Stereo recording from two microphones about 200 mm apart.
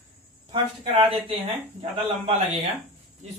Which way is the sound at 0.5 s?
25° right (ahead or behind).